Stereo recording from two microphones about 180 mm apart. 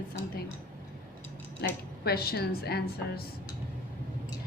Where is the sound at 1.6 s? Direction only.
65° left (ahead or behind).